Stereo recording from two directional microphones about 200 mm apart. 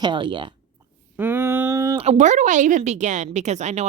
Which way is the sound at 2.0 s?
35° right (ahead or behind).